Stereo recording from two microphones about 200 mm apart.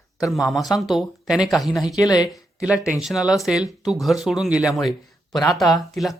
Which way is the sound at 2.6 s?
5° right (ahead or behind).